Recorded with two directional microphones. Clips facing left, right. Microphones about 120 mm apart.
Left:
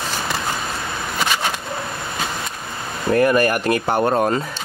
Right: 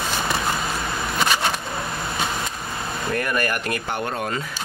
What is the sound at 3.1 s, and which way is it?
Speech, 30° left (ahead or behind).